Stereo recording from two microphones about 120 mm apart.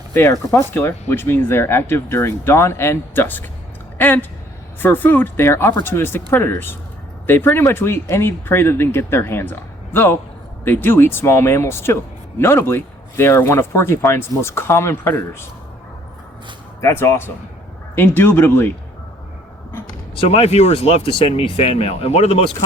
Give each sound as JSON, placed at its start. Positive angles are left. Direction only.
{"t": 0.1, "sound": "speech", "side_deg": 20}
{"t": 16.8, "sound": "speech", "side_deg": 20}
{"t": 19.7, "sound": "a sound", "side_deg": 20}
{"t": 20.2, "sound": "speech", "side_deg": 60}